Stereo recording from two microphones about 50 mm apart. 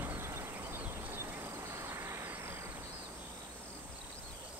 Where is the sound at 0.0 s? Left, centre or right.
Right.